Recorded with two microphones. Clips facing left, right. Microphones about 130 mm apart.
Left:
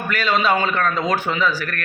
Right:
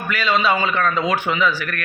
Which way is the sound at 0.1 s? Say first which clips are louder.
Even; 45° left (ahead or behind).